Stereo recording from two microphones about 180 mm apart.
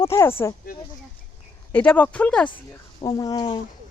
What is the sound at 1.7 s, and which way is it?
Speech, 10° left (ahead or behind).